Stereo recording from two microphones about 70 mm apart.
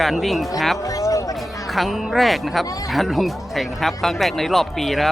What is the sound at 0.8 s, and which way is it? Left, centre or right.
Music, left.